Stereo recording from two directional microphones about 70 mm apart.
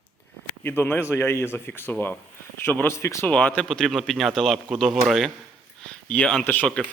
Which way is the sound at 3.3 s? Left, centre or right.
Left.